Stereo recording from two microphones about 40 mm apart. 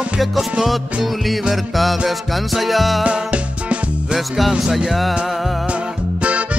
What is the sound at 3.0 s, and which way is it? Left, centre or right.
Music, right.